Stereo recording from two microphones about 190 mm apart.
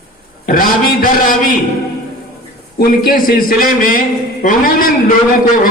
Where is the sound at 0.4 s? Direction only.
45° left (ahead or behind).